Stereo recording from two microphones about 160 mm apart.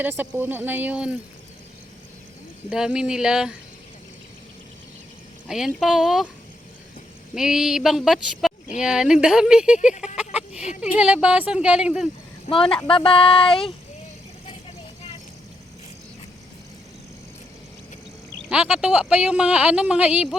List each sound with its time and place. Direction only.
0.0 s speech: 10° right (ahead or behind)
2.6 s speech: 5° right (ahead or behind)
5.5 s speech: 5° right (ahead or behind)
7.3 s speech: 5° right (ahead or behind)
10.3 s a sound: 45° left (ahead or behind)
10.8 s speech: 5° right (ahead or behind)
12.9 s speech: 35° left (ahead or behind)
18.4 s speech: 5° right (ahead or behind)